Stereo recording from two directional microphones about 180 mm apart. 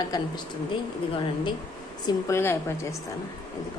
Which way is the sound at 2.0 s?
15° left (ahead or behind).